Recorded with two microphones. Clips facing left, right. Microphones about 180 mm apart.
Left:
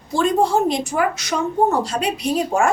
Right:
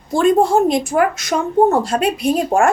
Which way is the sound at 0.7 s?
50° right (ahead or behind).